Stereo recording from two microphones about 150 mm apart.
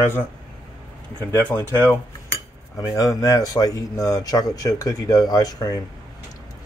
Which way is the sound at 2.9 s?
25° left (ahead or behind).